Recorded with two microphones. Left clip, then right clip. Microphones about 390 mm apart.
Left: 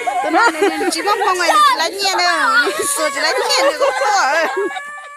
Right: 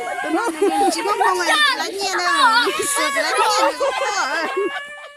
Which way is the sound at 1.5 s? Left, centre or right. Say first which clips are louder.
Left 8 dB; centre.